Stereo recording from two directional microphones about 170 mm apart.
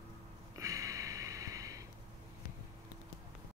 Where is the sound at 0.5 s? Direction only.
20° right (ahead or behind).